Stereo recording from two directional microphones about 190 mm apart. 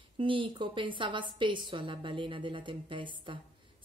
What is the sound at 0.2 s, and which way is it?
A woman's voice, 25° right (ahead or behind).